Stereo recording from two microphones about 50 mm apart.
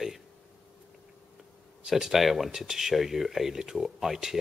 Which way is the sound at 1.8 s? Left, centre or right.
Centre.